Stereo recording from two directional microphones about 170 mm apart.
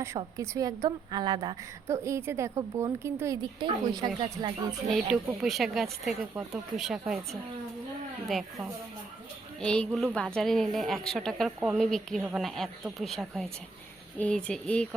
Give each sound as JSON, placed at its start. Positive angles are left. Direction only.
{"t": 0.2, "sound": "a woman's voice", "side_deg": -20}
{"t": 3.6, "sound": "speech", "side_deg": -25}
{"t": 4.9, "sound": "a woman's voice", "side_deg": 0}
{"t": 9.6, "sound": "a woman's voice", "side_deg": 5}